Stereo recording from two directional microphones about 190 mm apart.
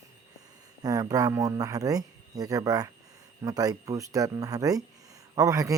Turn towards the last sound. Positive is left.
turn(degrees=-15)  # may be behind; listen again after turning